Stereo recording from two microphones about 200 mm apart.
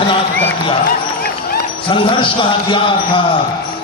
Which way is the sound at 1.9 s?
25° left (ahead or behind).